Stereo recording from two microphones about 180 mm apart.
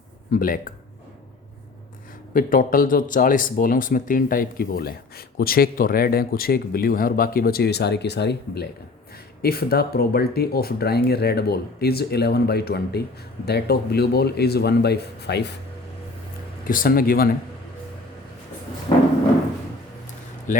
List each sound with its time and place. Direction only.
0.3 s speech: 50° left (ahead or behind)
2.3 s speech: 50° left (ahead or behind); by 15.5 s 70° left (ahead or behind)
16.6 s speech: 50° left (ahead or behind)
18.9 s a sound: 35° left (ahead or behind)
20.5 s speech: 45° left (ahead or behind)